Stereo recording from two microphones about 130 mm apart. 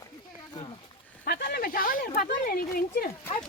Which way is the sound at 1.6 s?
90° left.